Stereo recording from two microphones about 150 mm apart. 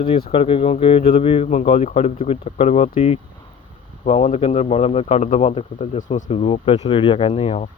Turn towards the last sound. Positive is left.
turn(degrees=40)  # may be behind; listen again after turning